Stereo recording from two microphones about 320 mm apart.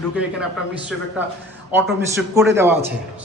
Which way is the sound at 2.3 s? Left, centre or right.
Centre.